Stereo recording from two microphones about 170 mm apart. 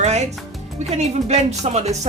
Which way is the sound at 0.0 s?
40° right (ahead or behind).